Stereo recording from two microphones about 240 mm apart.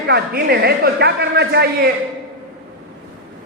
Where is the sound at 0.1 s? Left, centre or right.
Right.